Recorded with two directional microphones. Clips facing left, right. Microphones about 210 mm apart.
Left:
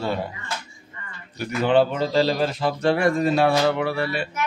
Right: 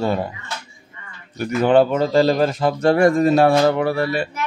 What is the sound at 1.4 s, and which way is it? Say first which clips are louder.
A man's voice: right 4 dB; 50° right (ahead or behind).